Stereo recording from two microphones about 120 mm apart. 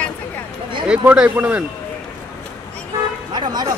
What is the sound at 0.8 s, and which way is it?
Speech, 10° right (ahead or behind).